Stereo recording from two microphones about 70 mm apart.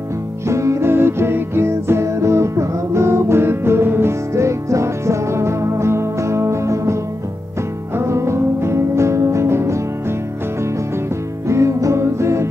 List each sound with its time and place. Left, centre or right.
0.5 s music: right
11.4 s music: right